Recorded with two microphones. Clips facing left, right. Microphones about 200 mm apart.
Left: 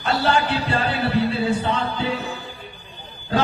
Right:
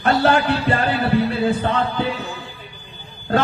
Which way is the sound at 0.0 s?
55° right (ahead or behind).